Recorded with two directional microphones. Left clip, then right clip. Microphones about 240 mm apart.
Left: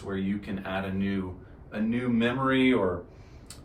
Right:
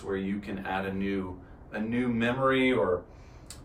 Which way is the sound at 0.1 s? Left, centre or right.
Centre.